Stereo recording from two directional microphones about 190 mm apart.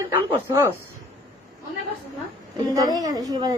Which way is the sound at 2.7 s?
20° right (ahead or behind).